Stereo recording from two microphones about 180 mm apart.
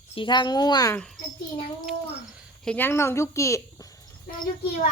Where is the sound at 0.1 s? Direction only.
25° left (ahead or behind).